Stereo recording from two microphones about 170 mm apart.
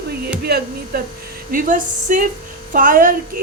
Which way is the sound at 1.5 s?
50° right (ahead or behind).